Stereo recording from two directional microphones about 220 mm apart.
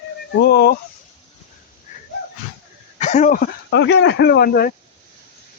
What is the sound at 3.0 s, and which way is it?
Speech, 35° left (ahead or behind).